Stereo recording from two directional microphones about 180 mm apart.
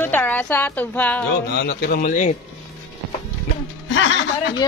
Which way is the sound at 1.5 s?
60° left (ahead or behind).